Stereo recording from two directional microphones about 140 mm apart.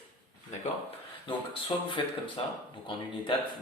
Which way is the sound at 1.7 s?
35° left (ahead or behind).